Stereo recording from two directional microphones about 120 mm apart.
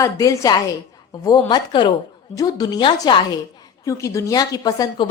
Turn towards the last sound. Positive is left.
turn(degrees=35)  # may be behind; listen again after turning